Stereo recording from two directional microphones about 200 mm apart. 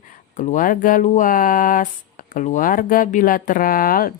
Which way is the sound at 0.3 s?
40° left (ahead or behind).